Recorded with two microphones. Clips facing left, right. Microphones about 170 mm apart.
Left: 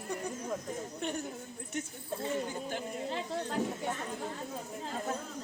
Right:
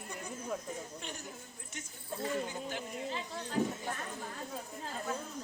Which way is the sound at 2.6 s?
45° left (ahead or behind).